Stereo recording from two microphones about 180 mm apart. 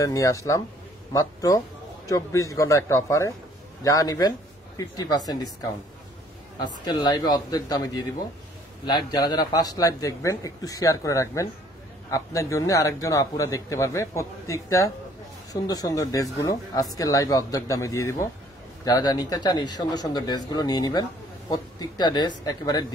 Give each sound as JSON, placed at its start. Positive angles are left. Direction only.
{"t": 0.0, "sound": "a man's voice", "side_deg": 20}
{"t": 6.6, "sound": "a man's voice", "side_deg": 25}